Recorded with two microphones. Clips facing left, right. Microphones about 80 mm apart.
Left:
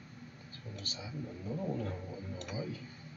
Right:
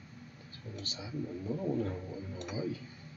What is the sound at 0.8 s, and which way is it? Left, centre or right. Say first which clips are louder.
Speech: right 2 dB; right.